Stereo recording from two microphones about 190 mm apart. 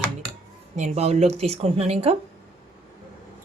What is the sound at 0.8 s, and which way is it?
Speech, 35° right (ahead or behind).